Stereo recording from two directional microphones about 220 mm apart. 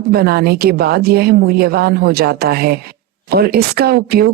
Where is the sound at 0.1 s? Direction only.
45° right (ahead or behind).